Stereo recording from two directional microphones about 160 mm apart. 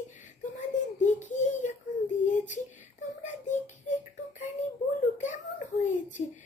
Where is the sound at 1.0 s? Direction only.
50° left (ahead or behind).